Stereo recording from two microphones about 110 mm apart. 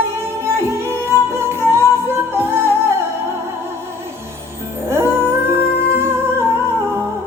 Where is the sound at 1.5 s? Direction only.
20° right (ahead or behind).